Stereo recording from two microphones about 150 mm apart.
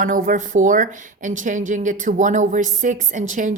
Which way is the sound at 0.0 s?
65° right (ahead or behind).